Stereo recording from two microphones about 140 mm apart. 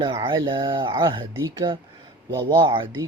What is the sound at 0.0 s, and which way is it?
Speech, 35° right (ahead or behind).